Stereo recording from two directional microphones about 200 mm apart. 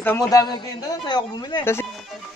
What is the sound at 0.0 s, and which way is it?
A man's voice, 10° left (ahead or behind).